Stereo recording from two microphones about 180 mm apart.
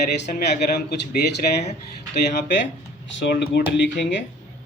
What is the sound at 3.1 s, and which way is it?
Speech, 75° left (ahead or behind).